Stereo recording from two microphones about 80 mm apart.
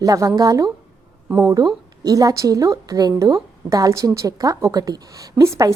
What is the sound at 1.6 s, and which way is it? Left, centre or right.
A woman's voice, right.